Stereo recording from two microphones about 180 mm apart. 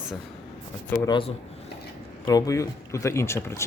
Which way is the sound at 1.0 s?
25° left (ahead or behind).